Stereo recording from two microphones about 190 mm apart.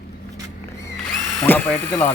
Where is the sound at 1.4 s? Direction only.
10° left (ahead or behind).